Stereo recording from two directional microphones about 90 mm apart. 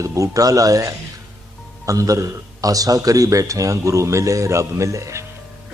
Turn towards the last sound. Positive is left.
turn(degrees=-35)  # may be behind; listen again after turning